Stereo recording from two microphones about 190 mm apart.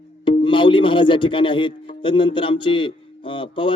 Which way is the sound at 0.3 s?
25° left (ahead or behind).